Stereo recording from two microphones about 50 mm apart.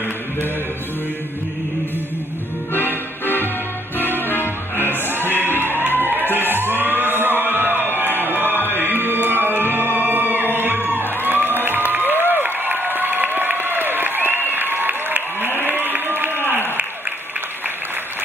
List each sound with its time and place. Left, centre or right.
4.0 s music: left
5.0 s music: right
8.5 s music: left
8.8 s music: right
11.9 s applause: right
15.8 s a sound: right